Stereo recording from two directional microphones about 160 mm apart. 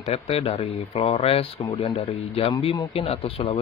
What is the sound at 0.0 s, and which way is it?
Speech, 40° left (ahead or behind).